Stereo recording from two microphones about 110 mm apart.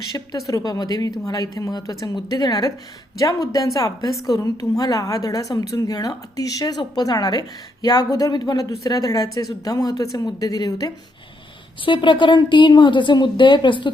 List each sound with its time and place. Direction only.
0.3 s a woman's voice: 30° left (ahead or behind)
11.9 s a woman's voice: 45° left (ahead or behind)